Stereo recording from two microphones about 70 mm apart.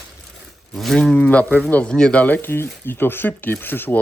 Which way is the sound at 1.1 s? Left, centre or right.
Centre.